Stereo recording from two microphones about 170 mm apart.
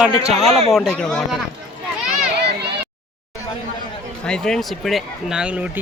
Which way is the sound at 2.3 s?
75° right (ahead or behind).